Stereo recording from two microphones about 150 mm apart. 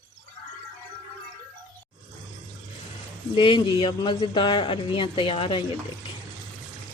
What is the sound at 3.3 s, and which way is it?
A man's voice, 35° left (ahead or behind).